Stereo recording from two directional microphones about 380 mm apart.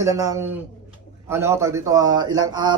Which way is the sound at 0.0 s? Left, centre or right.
Centre.